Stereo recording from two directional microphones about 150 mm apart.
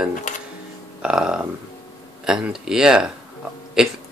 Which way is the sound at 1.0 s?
5° right (ahead or behind).